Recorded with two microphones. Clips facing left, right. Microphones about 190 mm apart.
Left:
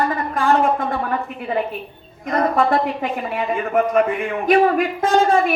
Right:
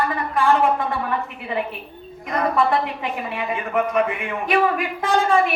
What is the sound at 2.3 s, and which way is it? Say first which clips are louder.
A woman's voice: left 2 dB; 45° left (ahead or behind).